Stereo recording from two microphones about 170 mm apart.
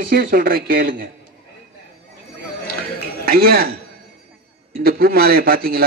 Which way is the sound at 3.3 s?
65° right (ahead or behind).